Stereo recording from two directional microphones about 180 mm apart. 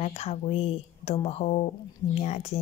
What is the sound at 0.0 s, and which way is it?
A woman's voice, 35° left (ahead or behind).